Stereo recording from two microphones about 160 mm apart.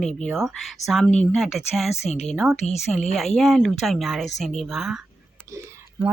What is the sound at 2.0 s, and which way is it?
Speech, 40° left (ahead or behind).